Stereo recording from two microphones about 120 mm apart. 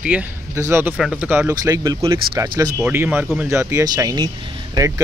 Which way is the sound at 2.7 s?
15° right (ahead or behind).